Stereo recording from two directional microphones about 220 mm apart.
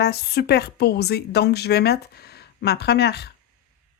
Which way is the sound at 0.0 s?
45° left (ahead or behind).